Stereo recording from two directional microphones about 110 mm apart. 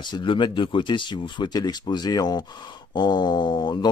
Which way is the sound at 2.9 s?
40° left (ahead or behind).